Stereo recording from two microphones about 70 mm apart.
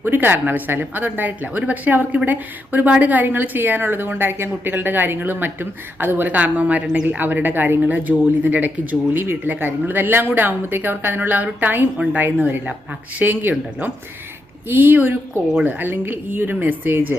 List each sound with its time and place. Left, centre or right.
0.0 s a woman's voice: right
7.2 s a woman's voice: right
14.7 s a woman's voice: right